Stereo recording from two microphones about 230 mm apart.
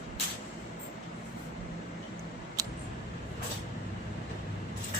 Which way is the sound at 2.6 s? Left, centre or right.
Centre.